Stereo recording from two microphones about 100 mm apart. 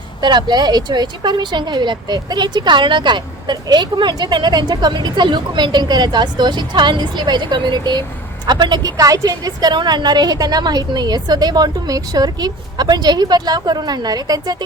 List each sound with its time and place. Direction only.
0.2 s speech: 50° right (ahead or behind)